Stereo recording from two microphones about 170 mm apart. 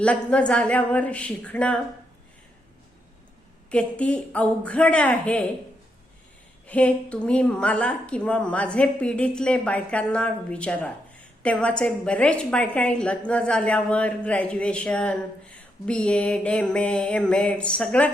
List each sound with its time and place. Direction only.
0.0 s a woman's voice: 5° left (ahead or behind)
3.7 s a woman's voice: 5° left (ahead or behind)
6.7 s a woman's voice: 10° left (ahead or behind)